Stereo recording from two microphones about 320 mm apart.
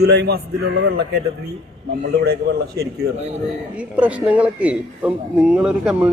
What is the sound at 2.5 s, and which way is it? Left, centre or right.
Speech, right.